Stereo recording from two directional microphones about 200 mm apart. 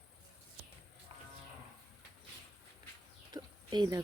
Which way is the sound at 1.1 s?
25° right (ahead or behind).